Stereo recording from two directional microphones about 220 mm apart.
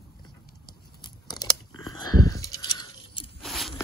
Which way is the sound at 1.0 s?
20° left (ahead or behind).